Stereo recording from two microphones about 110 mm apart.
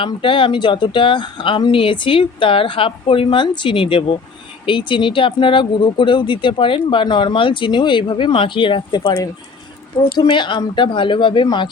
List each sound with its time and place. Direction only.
0.0 s speech: 50° left (ahead or behind)
10.2 s speech: 45° left (ahead or behind)